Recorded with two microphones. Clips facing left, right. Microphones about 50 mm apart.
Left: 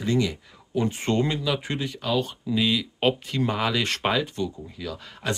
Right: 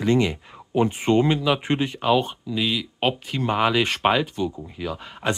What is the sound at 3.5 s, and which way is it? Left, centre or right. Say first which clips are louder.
Speech: right 6 dB; right.